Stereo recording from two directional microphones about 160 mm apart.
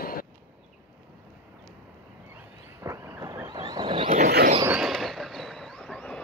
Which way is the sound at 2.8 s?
20° right (ahead or behind).